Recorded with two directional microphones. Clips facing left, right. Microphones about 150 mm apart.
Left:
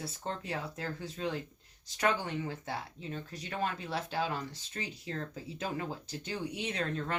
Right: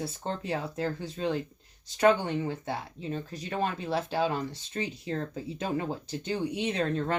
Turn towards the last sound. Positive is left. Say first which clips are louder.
# right 6 dB
turn(degrees=-30)  # may be behind; listen again after turning